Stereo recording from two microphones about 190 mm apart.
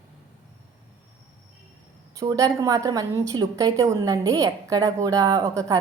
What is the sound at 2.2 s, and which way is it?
A woman's voice, 15° right (ahead or behind).